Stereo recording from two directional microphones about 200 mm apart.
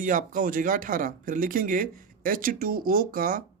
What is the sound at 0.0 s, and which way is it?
Speech, 40° right (ahead or behind).